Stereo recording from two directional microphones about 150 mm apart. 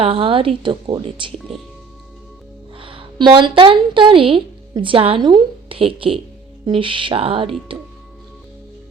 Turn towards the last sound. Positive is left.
turn(degrees=-35)  # may be behind; listen again after turning